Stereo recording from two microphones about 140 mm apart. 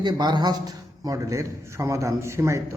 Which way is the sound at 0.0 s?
30° right (ahead or behind).